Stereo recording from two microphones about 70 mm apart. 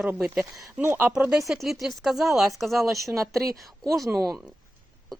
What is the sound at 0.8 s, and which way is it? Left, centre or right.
Speech, right.